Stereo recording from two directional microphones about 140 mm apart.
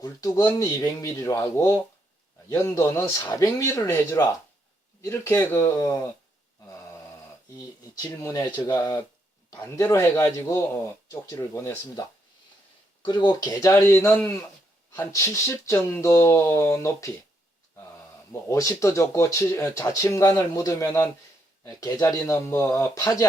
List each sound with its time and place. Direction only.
0.0 s speech: 25° left (ahead or behind)
7.9 s speech: 25° left (ahead or behind)
13.1 s speech: 30° left (ahead or behind)
18.4 s speech: 25° left (ahead or behind)